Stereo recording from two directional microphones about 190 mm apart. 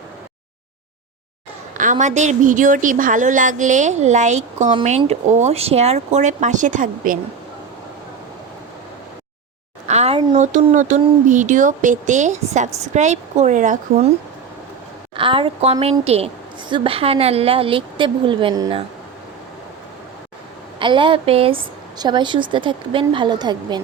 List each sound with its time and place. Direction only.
1.8 s a woman's voice: 40° right (ahead or behind)
9.8 s a sound: 35° right (ahead or behind)
10.3 s a woman's voice: 40° right (ahead or behind)
15.1 s a woman's voice: 30° right (ahead or behind)
20.7 s a woman's voice: 25° right (ahead or behind)